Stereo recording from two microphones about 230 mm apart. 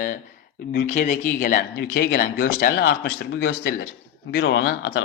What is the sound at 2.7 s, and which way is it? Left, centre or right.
Speech, left.